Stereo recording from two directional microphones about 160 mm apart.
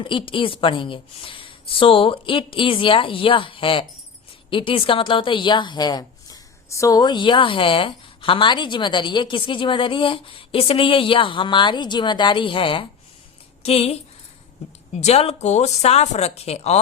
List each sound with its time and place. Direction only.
0.0 s a woman's voice: 30° left (ahead or behind)